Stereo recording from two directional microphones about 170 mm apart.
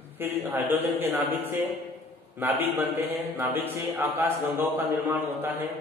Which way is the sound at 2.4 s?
10° right (ahead or behind).